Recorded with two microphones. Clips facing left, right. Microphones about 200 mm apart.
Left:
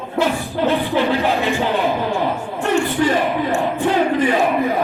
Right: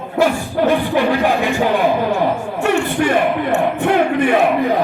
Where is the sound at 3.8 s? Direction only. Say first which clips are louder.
Even; 60° right (ahead or behind).